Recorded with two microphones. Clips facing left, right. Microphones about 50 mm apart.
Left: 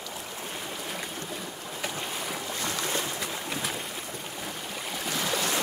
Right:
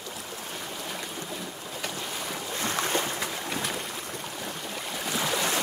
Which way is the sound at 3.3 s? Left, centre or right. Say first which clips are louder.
Right 1 dB; centre.